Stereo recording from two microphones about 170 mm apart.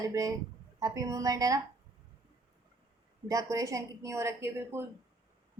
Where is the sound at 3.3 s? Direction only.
20° right (ahead or behind).